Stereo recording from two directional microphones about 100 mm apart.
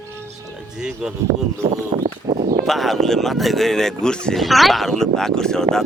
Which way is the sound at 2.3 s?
40° right (ahead or behind).